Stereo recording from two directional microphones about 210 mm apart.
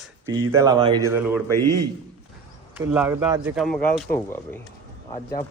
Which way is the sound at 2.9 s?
10° right (ahead or behind).